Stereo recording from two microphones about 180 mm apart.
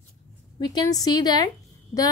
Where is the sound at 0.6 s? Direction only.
25° left (ahead or behind).